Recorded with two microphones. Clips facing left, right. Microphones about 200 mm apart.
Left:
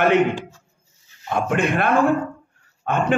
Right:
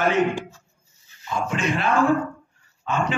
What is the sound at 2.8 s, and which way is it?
Speech, 55° left (ahead or behind).